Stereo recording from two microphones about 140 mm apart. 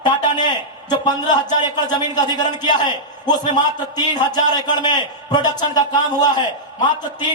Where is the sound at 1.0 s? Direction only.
65° left (ahead or behind).